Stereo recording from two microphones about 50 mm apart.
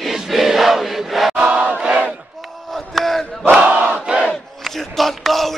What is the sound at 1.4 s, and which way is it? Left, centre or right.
Battle cry, centre.